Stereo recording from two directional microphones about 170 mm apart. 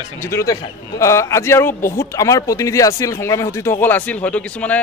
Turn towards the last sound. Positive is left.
turn(degrees=5)  # may be behind; listen again after turning